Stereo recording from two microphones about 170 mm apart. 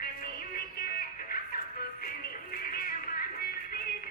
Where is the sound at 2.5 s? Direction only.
60° left (ahead or behind).